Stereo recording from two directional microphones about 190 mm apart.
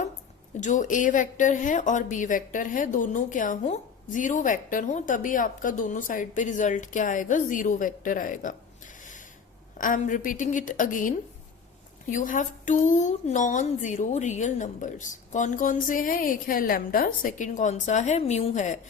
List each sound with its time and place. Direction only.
0.6 s speech: 40° left (ahead or behind)
9.7 s speech: 45° left (ahead or behind)
12.1 s a woman's voice: 40° left (ahead or behind)